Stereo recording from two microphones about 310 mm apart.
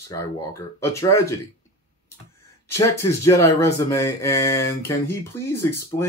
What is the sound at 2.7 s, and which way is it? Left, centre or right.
Speech, centre.